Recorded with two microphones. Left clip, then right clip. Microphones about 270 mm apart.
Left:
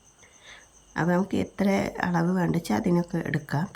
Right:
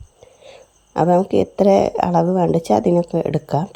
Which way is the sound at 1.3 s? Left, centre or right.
Centre.